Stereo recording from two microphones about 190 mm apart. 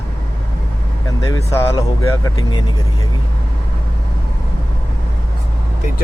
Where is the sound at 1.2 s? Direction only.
20° left (ahead or behind).